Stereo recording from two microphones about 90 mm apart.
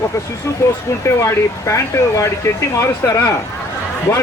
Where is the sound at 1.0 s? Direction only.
30° left (ahead or behind).